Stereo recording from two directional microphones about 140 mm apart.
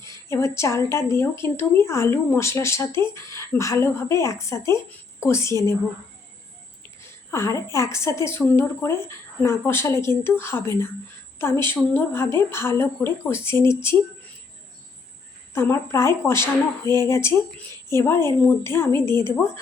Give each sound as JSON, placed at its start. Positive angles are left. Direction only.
{"t": 0.0, "sound": "speech", "side_deg": 20}
{"t": 7.3, "sound": "speech", "side_deg": 20}
{"t": 15.5, "sound": "a woman's voice", "side_deg": 20}